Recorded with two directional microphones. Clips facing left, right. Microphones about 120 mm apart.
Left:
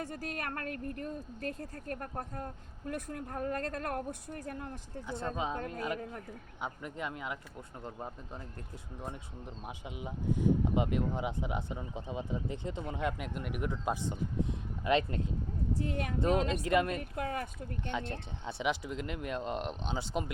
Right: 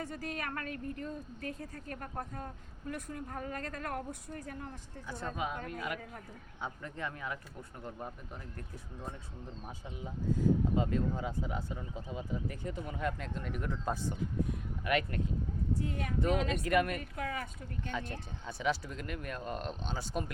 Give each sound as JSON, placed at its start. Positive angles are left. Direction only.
{"t": 0.4, "sound": "a woman's voice", "side_deg": 50}
{"t": 5.0, "sound": "speech", "side_deg": 25}
{"t": 6.6, "sound": "speech", "side_deg": 15}
{"t": 9.6, "sound": "speech", "side_deg": 15}
{"t": 15.7, "sound": "speech", "side_deg": 90}
{"t": 16.2, "sound": "speech", "side_deg": 35}
{"t": 17.2, "sound": "a woman's voice", "side_deg": 45}
{"t": 17.8, "sound": "speech", "side_deg": 25}